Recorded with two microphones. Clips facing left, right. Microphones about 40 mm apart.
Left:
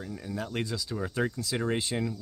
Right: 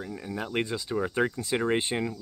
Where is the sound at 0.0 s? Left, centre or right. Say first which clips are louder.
Right 2 dB; centre.